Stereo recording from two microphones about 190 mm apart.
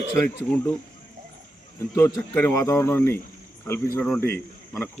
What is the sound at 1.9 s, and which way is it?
A man's voice, 10° left (ahead or behind).